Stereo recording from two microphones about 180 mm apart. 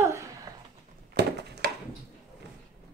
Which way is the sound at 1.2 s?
65° right (ahead or behind).